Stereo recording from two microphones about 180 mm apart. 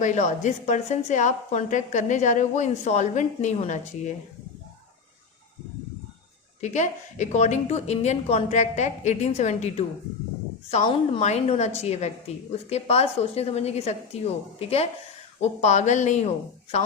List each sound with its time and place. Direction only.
0.0 s a woman's voice: 40° left (ahead or behind)
6.6 s a woman's voice: 40° left (ahead or behind)